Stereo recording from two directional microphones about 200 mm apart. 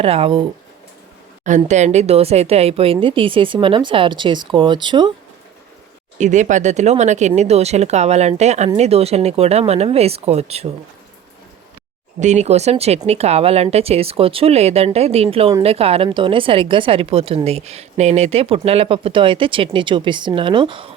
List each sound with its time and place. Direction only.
0.0 s a woman's voice: 30° right (ahead or behind)
1.5 s a woman's voice: 35° right (ahead or behind)
6.1 s speech: 35° right (ahead or behind)
12.2 s a woman's voice: 35° right (ahead or behind)